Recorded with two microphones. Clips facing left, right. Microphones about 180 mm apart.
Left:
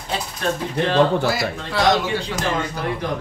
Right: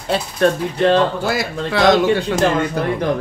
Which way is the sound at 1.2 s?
60° right (ahead or behind).